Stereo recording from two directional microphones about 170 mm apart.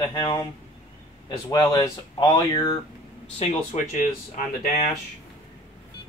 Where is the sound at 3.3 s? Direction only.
45° left (ahead or behind).